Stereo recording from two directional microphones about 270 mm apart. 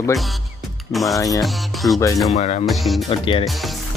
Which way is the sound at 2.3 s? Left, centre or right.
Left.